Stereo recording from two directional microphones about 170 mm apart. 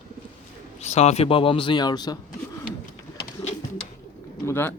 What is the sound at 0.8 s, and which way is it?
Speech, 40° left (ahead or behind).